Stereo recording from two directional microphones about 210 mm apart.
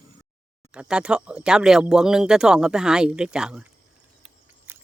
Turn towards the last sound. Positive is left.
turn(degrees=-10)  # may be behind; listen again after turning